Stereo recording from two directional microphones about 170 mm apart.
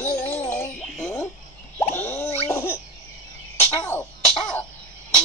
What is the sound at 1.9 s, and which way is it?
Plop, 15° left (ahead or behind).